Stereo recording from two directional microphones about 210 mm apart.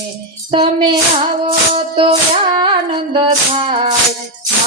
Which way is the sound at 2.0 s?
25° right (ahead or behind).